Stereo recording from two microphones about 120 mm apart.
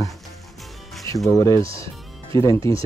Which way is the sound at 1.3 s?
25° left (ahead or behind).